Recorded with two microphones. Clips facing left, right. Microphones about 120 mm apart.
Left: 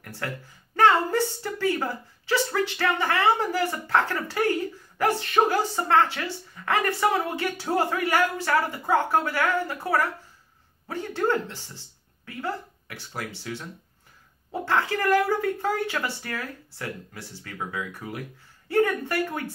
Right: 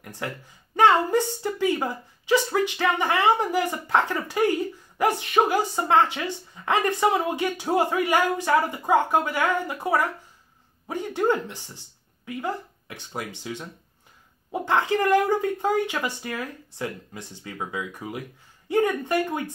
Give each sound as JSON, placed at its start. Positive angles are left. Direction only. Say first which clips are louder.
{"t": 0.0, "sound": "a woman's voice", "louder": "right 1 dB", "side_deg": -20}